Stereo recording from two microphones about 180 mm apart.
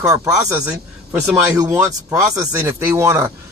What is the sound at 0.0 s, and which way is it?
Speech, 20° right (ahead or behind).